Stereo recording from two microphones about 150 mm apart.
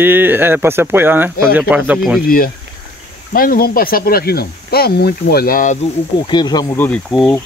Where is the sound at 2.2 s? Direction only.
75° left (ahead or behind).